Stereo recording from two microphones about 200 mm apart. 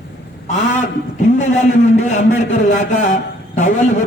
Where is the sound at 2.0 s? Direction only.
35° left (ahead or behind).